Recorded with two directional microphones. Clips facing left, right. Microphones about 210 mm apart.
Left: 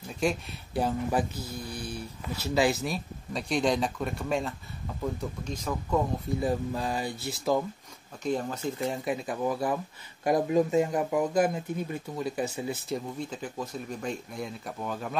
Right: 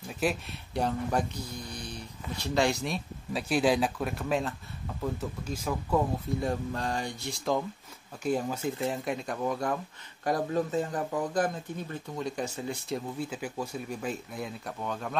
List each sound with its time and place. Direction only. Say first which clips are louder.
0.2 s speech: left 1 dB; centre (ahead or behind)
8.2 s speech: right 1 dB; 10° right (ahead or behind)